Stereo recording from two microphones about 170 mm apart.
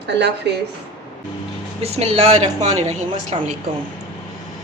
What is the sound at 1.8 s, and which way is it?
A man's voice, 40° right (ahead or behind).